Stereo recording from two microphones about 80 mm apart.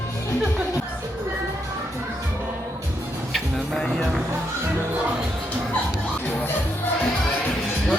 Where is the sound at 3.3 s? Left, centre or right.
Centre.